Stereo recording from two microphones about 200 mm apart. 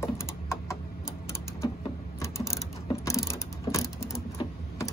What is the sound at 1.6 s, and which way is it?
Typing, 15° left (ahead or behind).